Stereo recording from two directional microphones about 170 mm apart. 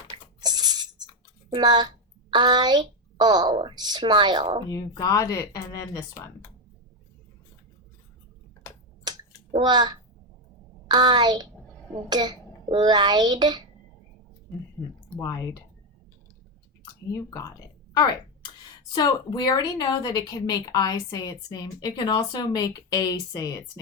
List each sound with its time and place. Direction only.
0.4 s a sound: 25° right (ahead or behind)
1.5 s a woman's voice: 25° right (ahead or behind)
4.7 s a woman's voice: 20° left (ahead or behind)
9.1 s finger snapping: 25° right (ahead or behind)
9.6 s a woman's voice: 25° right (ahead or behind)
15.2 s a woman's voice: 20° left (ahead or behind)
17.1 s a woman's voice: 20° left (ahead or behind)
18.9 s a woman's voice: 25° left (ahead or behind)